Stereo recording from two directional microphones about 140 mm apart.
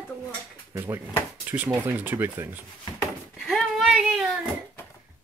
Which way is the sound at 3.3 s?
Centre (ahead or behind).